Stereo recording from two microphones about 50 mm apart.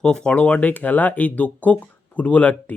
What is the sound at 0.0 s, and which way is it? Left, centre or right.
Speech, centre.